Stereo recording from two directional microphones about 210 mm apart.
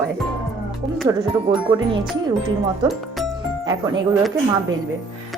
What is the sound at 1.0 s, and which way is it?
Speech, 15° right (ahead or behind).